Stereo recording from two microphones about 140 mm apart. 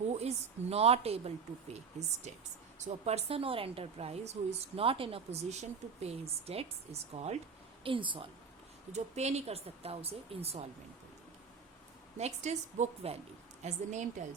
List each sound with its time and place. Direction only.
0.1 s a woman's voice: 50° right (ahead or behind)
7.9 s a woman's voice: 35° right (ahead or behind)
8.9 s a woman's voice: 55° right (ahead or behind)
12.1 s a woman's voice: 55° right (ahead or behind)